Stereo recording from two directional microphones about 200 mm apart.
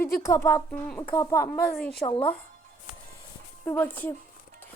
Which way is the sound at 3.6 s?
10° left (ahead or behind).